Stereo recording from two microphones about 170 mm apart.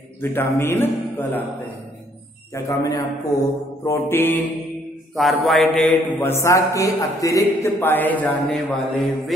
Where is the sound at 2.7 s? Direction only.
20° left (ahead or behind).